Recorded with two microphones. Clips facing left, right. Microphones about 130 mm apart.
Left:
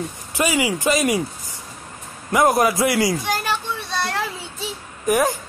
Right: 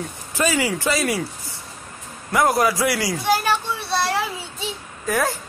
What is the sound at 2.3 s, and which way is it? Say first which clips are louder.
Speech: left 2 dB; 20° left (ahead or behind).